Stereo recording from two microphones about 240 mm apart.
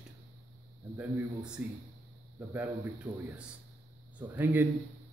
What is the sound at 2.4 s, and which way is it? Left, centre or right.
A man's voice, centre.